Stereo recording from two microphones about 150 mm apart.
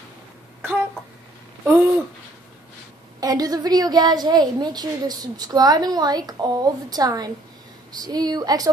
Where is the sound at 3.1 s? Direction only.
25° right (ahead or behind).